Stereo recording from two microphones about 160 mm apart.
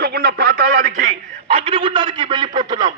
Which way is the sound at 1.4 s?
35° right (ahead or behind).